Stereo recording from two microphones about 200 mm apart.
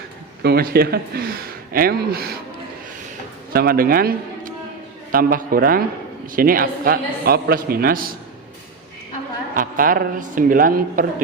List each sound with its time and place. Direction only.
0.4 s speech: 50° right (ahead or behind)
3.5 s speech: 50° right (ahead or behind)
9.6 s speech: 45° right (ahead or behind)